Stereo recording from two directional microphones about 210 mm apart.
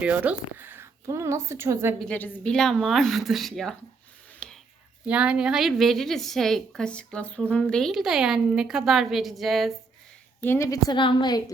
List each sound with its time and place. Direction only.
0.0 s a woman's voice: 5° right (ahead or behind)
2.0 s a woman's voice: 5° left (ahead or behind)
4.4 s a sound: 5° left (ahead or behind)
5.0 s a woman's voice: 5° right (ahead or behind)
10.4 s a woman's voice: 10° left (ahead or behind)